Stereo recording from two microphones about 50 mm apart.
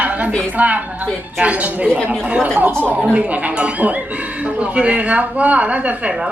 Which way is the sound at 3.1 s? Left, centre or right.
Right.